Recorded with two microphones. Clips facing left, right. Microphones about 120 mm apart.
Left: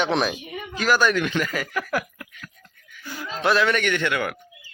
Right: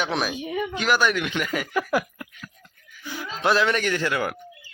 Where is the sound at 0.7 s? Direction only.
15° right (ahead or behind).